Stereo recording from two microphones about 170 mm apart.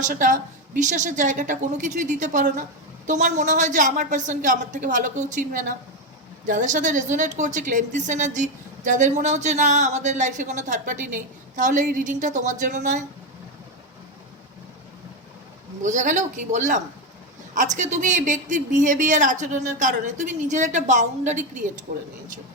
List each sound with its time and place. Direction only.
0.0 s a woman's voice: 50° right (ahead or behind)
15.8 s a woman's voice: 45° right (ahead or behind)